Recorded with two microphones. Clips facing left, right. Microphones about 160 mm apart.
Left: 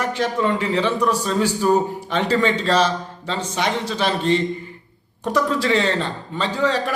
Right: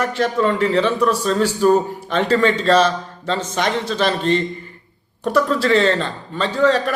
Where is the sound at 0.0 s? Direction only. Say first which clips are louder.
Right 3 dB; 15° left (ahead or behind).